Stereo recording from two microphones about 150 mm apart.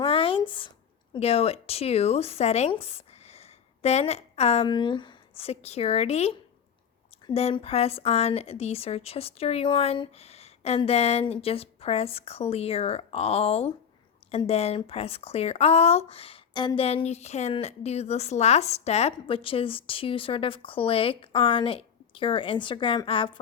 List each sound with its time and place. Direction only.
0.0 s a sound: 35° left (ahead or behind)
1.1 s speech: 40° left (ahead or behind)
4.7 s a woman's voice: 30° left (ahead or behind)